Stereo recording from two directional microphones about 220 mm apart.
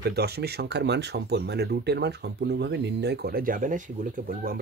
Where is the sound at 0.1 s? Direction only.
45° right (ahead or behind).